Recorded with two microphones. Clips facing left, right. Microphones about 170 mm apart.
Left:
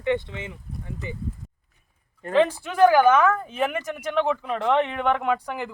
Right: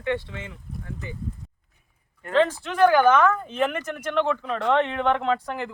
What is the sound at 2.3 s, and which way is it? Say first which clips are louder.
Speech: left 1 dB; 10° left (ahead or behind).